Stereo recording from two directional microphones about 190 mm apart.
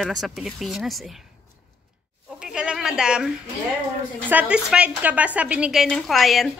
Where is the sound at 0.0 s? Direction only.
Centre (ahead or behind).